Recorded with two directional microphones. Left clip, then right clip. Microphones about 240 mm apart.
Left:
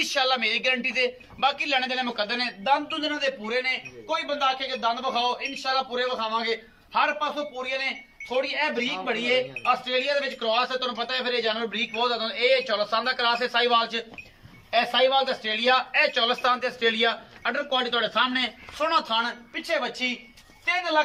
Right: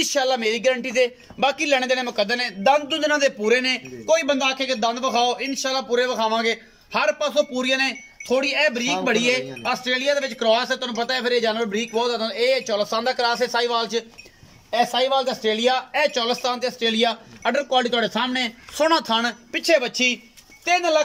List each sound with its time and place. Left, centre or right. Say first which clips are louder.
0.0 s a man's voice: right 3 dB; right